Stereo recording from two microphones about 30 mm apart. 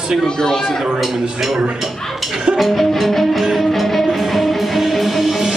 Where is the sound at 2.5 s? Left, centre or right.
Centre.